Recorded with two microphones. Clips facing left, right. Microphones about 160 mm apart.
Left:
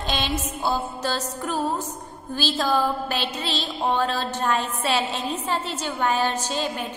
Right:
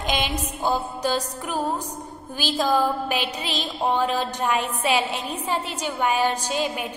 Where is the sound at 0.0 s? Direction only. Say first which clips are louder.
Right 1 dB; 15° right (ahead or behind).